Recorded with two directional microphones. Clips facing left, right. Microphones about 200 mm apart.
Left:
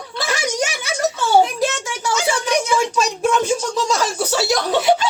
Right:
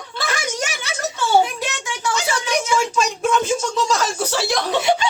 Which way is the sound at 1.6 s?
35° left (ahead or behind).